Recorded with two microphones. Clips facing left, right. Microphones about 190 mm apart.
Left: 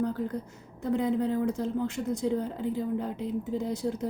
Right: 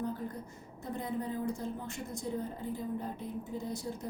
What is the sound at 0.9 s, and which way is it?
Speech, 90° left.